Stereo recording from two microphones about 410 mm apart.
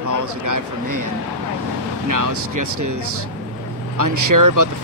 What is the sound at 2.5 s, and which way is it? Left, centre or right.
Speech, right.